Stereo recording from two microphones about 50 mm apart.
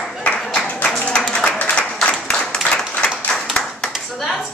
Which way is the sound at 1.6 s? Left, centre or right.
Left.